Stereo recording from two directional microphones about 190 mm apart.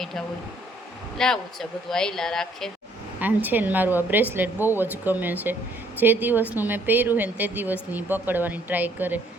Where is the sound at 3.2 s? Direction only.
10° right (ahead or behind).